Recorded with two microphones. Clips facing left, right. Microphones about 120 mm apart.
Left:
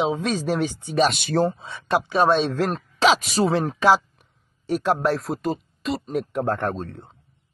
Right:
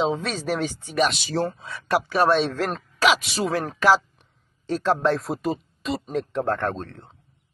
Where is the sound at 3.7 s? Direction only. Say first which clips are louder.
Left 1 dB; 15° left (ahead or behind).